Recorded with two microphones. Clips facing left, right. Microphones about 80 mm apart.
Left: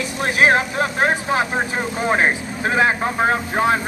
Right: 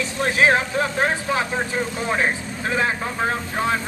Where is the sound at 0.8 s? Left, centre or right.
Left.